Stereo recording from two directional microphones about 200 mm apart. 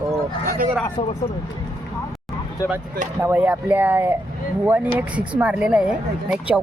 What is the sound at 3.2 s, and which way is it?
Speech, 10° right (ahead or behind).